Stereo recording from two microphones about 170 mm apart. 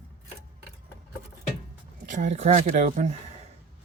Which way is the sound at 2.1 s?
45° right (ahead or behind).